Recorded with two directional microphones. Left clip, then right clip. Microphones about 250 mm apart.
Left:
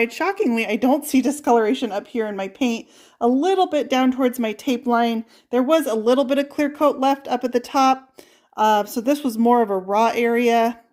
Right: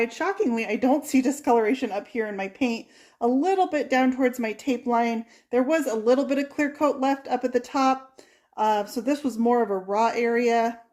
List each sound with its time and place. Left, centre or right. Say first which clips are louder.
0.0 s speech: left 4 dB; left